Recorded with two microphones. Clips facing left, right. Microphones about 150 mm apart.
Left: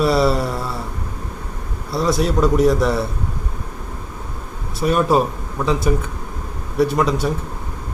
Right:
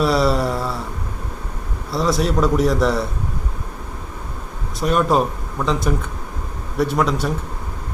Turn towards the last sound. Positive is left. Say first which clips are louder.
# left 2 dB
turn(degrees=0)  # may be behind; listen again after turning